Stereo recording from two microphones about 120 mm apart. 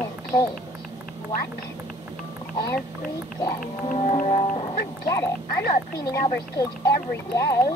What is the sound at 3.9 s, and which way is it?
Music, 75° left (ahead or behind).